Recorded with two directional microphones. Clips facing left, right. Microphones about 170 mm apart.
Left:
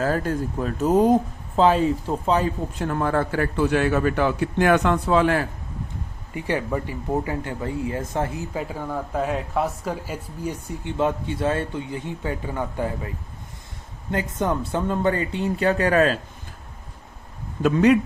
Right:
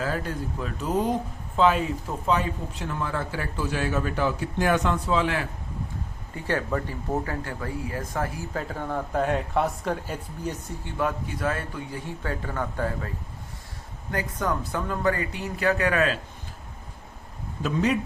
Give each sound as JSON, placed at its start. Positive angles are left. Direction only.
{"t": 0.0, "sound": "speech", "side_deg": 45}
{"t": 2.7, "sound": "a man's voice", "side_deg": 50}
{"t": 6.3, "sound": "speech", "side_deg": 15}
{"t": 8.5, "sound": "speech", "side_deg": 10}
{"t": 10.9, "sound": "speech", "side_deg": 25}
{"t": 14.1, "sound": "speech", "side_deg": 25}
{"t": 17.6, "sound": "a man's voice", "side_deg": 65}